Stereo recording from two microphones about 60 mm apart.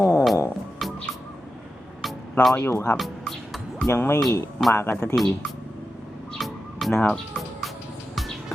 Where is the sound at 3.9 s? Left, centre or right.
Left.